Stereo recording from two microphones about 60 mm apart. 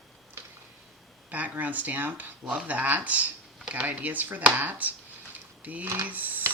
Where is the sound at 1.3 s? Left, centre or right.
Right.